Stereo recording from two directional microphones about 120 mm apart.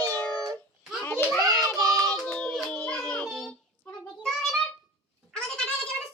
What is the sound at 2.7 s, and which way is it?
Music, 10° left (ahead or behind).